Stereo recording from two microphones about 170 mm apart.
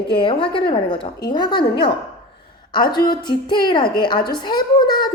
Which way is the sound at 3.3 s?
25° left (ahead or behind).